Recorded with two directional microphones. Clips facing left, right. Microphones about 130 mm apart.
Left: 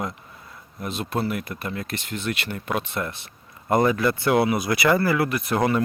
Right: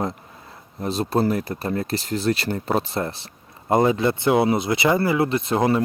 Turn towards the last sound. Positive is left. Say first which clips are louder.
# right 2 dB
turn(degrees=-25)  # may be behind; listen again after turning